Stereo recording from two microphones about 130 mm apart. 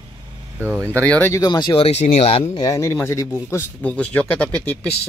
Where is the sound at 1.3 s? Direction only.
30° left (ahead or behind).